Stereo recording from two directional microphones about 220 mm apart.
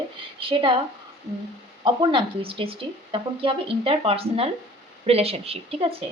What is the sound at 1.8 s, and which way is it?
Speech, 20° right (ahead or behind).